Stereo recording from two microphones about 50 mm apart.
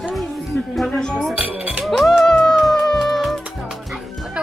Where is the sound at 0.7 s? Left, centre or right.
Centre.